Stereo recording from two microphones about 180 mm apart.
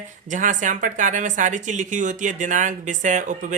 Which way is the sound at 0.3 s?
45° right (ahead or behind).